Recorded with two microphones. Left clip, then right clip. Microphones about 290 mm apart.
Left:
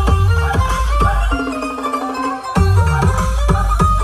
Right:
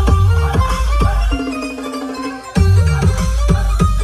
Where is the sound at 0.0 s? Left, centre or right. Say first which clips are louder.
Left 1 dB; left.